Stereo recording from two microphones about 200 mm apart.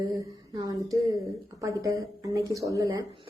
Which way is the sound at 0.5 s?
15° right (ahead or behind).